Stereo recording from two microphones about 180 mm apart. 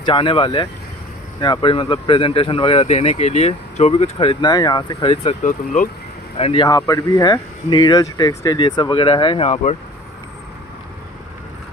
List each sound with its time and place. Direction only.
0.0 s speech: 25° left (ahead or behind); by 5.9 s 45° left (ahead or behind)
6.3 s speech: 30° left (ahead or behind)